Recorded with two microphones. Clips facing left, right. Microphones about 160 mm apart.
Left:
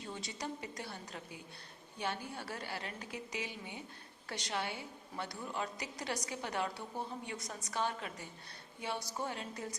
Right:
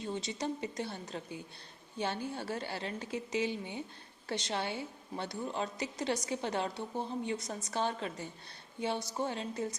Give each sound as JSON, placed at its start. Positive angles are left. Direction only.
{"t": 0.1, "sound": "a woman's voice", "side_deg": -25}